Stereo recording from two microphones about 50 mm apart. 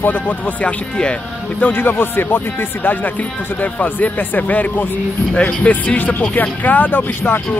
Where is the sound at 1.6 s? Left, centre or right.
Left.